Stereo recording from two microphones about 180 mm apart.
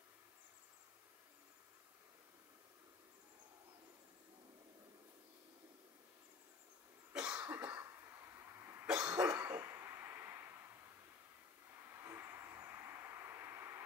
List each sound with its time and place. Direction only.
7.1 s cough: 5° right (ahead or behind)
11.9 s vehicle: 15° right (ahead or behind)